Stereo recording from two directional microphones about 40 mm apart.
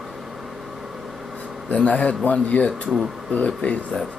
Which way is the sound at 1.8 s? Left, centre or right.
Left.